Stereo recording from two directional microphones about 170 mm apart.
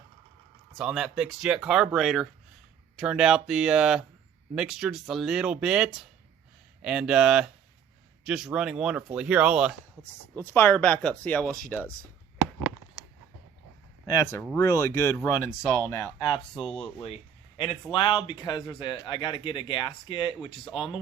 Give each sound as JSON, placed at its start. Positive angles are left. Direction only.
{"t": 0.7, "sound": "speech", "side_deg": 0}
{"t": 10.0, "sound": "speech", "side_deg": 10}
{"t": 14.5, "sound": "speech", "side_deg": 15}
{"t": 16.6, "sound": "chopping", "side_deg": 30}
{"t": 17.9, "sound": "speech", "side_deg": 30}
{"t": 20.7, "sound": "chopping", "side_deg": 30}